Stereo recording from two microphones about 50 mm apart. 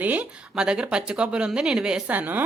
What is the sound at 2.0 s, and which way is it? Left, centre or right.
Speech, right.